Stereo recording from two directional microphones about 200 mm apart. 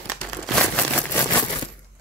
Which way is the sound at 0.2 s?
5° left (ahead or behind).